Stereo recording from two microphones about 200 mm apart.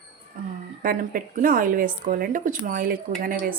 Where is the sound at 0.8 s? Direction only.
45° right (ahead or behind).